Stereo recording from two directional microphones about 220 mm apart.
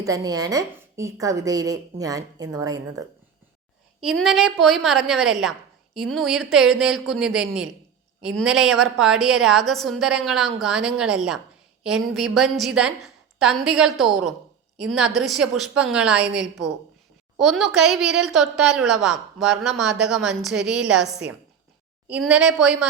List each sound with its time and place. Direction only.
0.0 s a woman's voice: 15° right (ahead or behind)
4.0 s a woman's voice: centre (ahead or behind)